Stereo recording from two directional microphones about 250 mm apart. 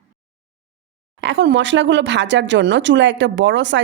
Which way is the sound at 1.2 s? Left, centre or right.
Right.